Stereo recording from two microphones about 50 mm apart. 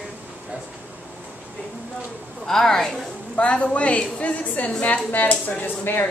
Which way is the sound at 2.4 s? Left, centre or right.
Centre.